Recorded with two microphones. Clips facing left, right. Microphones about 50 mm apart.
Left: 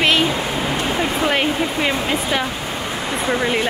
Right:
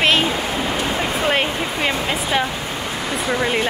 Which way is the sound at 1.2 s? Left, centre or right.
Centre.